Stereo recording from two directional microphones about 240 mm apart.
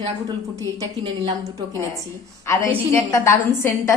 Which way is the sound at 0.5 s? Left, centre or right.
Centre.